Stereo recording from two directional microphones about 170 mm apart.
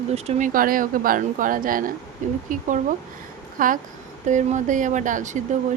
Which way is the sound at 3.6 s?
55° right (ahead or behind).